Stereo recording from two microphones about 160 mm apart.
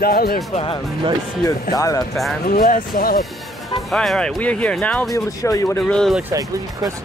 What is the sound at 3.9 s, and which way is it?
Speech, 5° left (ahead or behind).